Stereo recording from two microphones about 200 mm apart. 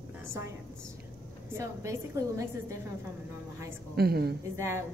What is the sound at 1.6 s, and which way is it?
A woman's voice, 15° right (ahead or behind).